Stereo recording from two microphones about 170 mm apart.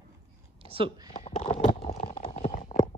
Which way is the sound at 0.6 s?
35° right (ahead or behind).